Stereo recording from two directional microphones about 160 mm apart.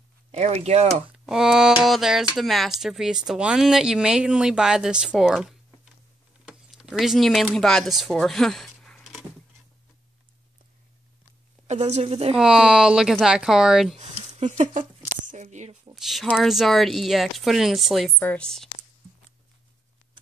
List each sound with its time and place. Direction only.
0.3 s speech: 40° right (ahead or behind)
1.1 s speech: 5° right (ahead or behind)
6.4 s a sound: centre (ahead or behind)
7.5 s speech: centre (ahead or behind)
11.6 s a woman's voice: 45° right (ahead or behind)
12.4 s speech: 5° right (ahead or behind)
14.4 s speech: 50° right (ahead or behind)
15.9 s speech: centre (ahead or behind)